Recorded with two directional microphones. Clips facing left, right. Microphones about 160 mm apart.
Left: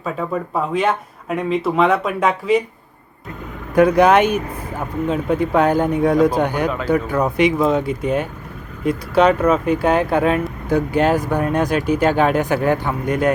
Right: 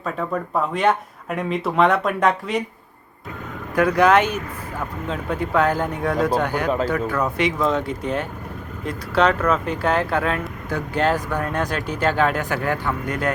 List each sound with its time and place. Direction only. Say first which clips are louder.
0.0 s speech: left 2 dB; 5° left (ahead or behind)
3.8 s speech: left 4 dB; 20° left (ahead or behind)